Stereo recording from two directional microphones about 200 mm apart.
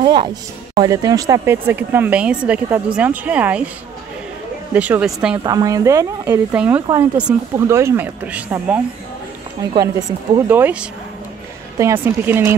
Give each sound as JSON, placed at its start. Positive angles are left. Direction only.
{"t": 0.0, "sound": "speech", "side_deg": -25}
{"t": 4.7, "sound": "speech", "side_deg": -10}
{"t": 5.4, "sound": "speech", "side_deg": -20}
{"t": 6.5, "sound": "speech", "side_deg": -5}
{"t": 9.6, "sound": "speech", "side_deg": -20}